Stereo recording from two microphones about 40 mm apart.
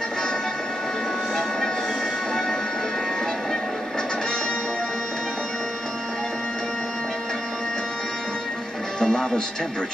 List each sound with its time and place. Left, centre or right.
9.0 s speech: centre